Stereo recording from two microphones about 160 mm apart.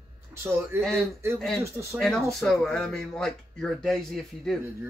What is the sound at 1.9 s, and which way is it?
A man's voice, centre (ahead or behind).